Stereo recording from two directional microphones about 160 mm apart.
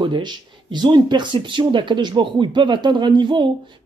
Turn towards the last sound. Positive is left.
turn(degrees=-30)  # may be behind; listen again after turning